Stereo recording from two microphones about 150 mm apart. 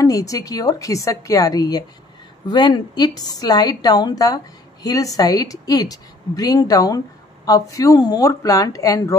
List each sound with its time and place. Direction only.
0.0 s a woman's voice: 20° left (ahead or behind)